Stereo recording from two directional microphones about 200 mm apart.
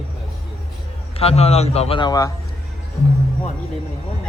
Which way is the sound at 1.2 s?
30° left (ahead or behind).